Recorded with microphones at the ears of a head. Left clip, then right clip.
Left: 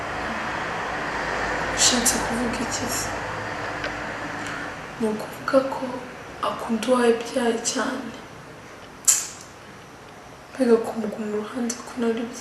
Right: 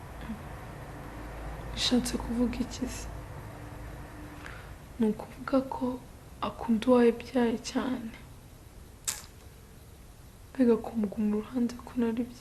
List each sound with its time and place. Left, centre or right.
0.0 s vehicle: left
7.1 s speech: left
10.7 s speech: left